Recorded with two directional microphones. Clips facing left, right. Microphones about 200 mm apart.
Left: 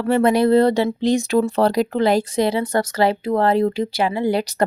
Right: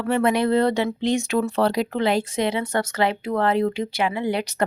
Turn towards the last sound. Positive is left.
turn(degrees=35)  # may be behind; listen again after turning